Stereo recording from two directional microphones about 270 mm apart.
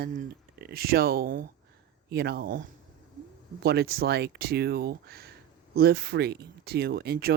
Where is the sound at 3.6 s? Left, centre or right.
Right.